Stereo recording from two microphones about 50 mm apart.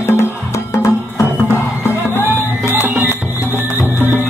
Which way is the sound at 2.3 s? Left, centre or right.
Left.